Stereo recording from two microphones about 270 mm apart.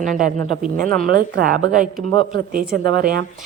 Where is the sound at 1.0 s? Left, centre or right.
Right.